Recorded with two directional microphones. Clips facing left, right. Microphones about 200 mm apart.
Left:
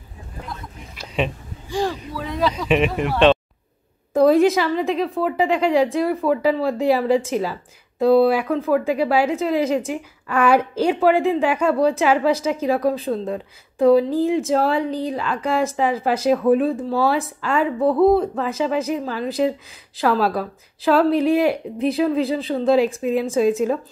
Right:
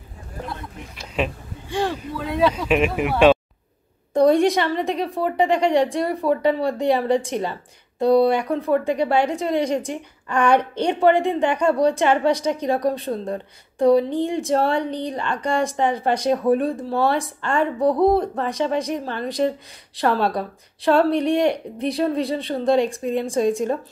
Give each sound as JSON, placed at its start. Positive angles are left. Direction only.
{"t": 1.1, "sound": "speech", "side_deg": 0}
{"t": 17.7, "sound": "speech", "side_deg": -15}
{"t": 18.0, "sound": "speech", "side_deg": 0}